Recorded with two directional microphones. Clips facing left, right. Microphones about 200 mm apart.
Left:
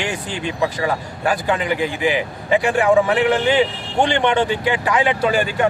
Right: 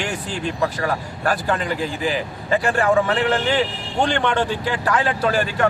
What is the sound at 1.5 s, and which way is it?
Speech, 15° left (ahead or behind).